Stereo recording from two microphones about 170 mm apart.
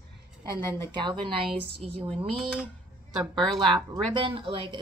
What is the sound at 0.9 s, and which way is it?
Speech, 25° right (ahead or behind).